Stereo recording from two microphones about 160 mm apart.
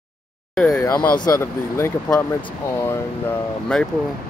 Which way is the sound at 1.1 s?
25° left (ahead or behind).